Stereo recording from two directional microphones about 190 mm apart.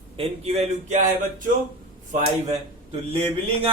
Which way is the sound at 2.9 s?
30° right (ahead or behind).